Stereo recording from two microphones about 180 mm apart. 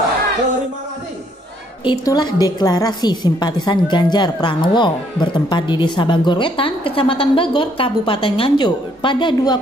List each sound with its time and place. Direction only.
1.9 s a woman's voice: 25° left (ahead or behind)